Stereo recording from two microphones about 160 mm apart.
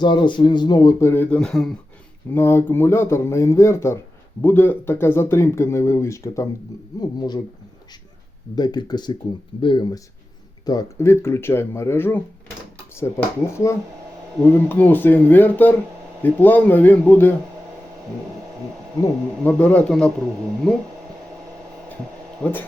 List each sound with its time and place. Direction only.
0.0 s speech: 30° left (ahead or behind); by 1.7 s 5° left (ahead or behind)
2.3 s speech: 15° left (ahead or behind)
8.5 s speech: 25° left (ahead or behind)
10.7 s speech: 20° left (ahead or behind)
19.4 s speech: 10° left (ahead or behind)
22.4 s speech: 10° left (ahead or behind)